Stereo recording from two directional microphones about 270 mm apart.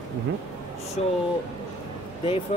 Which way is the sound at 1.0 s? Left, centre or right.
Left.